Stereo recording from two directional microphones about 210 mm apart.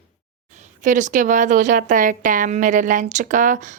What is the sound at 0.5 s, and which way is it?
Speech, 35° right (ahead or behind).